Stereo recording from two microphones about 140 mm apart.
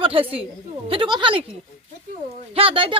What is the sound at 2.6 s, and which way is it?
Speech, 40° right (ahead or behind).